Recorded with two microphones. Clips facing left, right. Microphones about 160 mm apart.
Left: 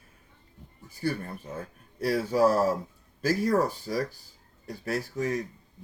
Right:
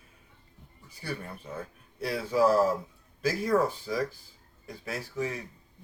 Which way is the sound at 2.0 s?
40° left (ahead or behind).